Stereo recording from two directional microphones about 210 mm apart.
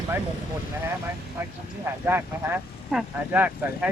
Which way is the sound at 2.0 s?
10° right (ahead or behind).